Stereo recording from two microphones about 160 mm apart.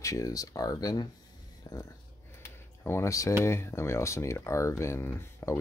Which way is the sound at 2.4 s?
15° left (ahead or behind).